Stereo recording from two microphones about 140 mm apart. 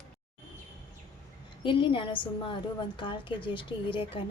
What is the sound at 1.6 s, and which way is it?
A woman's voice, 35° left (ahead or behind).